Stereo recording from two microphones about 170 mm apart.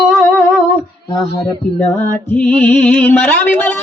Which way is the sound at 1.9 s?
10° left (ahead or behind).